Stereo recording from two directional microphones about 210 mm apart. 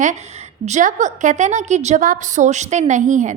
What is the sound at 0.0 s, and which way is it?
A woman's voice, 35° right (ahead or behind).